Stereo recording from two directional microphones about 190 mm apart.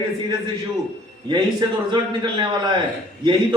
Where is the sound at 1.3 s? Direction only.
25° right (ahead or behind).